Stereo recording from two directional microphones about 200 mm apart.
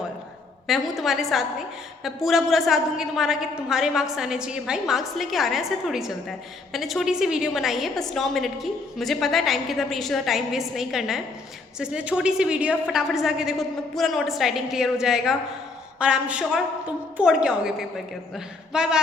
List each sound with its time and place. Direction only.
0.7 s a woman's voice: centre (ahead or behind)